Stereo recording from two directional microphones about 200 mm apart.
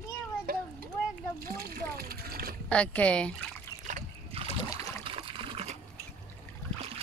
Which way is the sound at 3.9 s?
40° right (ahead or behind).